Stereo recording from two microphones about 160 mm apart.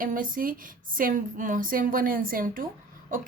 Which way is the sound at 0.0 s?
60° right (ahead or behind).